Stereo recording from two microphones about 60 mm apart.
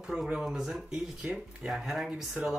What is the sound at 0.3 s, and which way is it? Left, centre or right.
Speech, centre.